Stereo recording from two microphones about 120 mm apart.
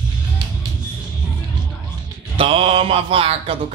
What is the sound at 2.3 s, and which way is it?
Mantra, 50° right (ahead or behind).